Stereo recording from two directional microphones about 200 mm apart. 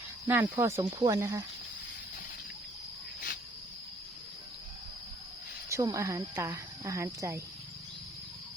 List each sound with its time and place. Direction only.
0.3 s speech: 10° right (ahead or behind)
5.6 s speech: 15° right (ahead or behind)